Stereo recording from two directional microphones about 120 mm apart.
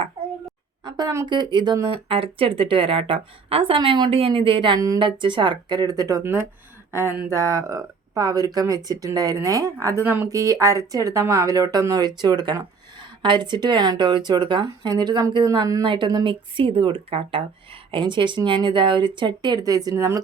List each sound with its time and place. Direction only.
1.3 s speech: 40° right (ahead or behind)
2.0 s a woman's voice: 50° right (ahead or behind)
4.1 s a woman's voice: 50° right (ahead or behind); by 20.2 s 30° right (ahead or behind)